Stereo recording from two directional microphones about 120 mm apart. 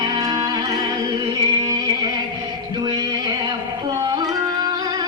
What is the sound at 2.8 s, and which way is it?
Music, 35° right (ahead or behind).